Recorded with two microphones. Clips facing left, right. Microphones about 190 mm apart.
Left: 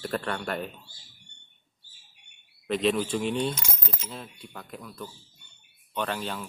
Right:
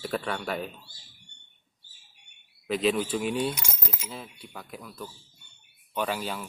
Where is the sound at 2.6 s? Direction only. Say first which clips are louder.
Even; centre (ahead or behind).